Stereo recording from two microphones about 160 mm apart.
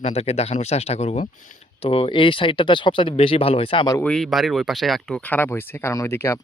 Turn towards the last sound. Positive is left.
turn(degrees=15)  # may be behind; listen again after turning